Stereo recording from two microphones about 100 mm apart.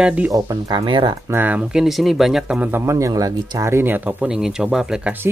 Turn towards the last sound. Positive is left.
turn(degrees=-5)  # may be behind; listen again after turning